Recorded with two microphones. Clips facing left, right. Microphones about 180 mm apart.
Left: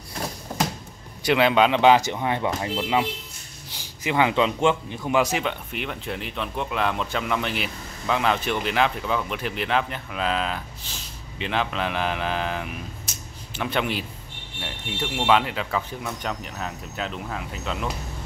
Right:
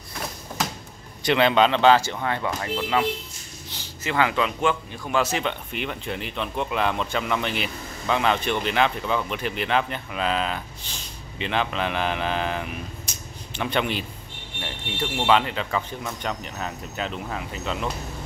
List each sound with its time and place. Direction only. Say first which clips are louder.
1.2 s speech: even; 5° left (ahead or behind)